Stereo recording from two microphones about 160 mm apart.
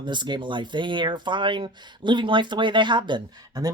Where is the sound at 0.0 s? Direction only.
30° right (ahead or behind).